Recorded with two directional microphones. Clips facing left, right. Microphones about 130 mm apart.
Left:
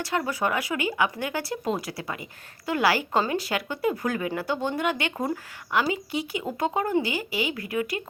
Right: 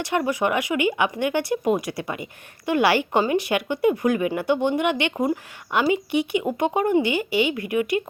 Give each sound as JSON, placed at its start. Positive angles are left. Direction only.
{"t": 0.0, "sound": "speech", "side_deg": -20}